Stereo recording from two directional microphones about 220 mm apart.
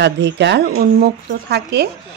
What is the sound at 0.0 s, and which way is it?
Speech, 50° right (ahead or behind).